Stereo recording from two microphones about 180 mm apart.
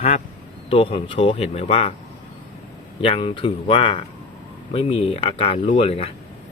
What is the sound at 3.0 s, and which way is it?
Speech, 30° left (ahead or behind).